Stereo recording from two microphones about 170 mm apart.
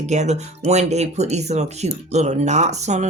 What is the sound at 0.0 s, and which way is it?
Speech, 40° right (ahead or behind).